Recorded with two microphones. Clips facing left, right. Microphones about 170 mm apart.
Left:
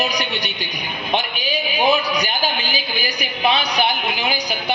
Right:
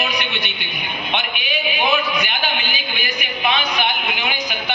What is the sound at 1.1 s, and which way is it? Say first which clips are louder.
A man's voice: left 3 dB; 35° left (ahead or behind).